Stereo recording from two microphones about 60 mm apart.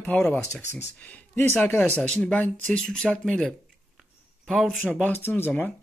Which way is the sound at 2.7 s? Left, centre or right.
Centre.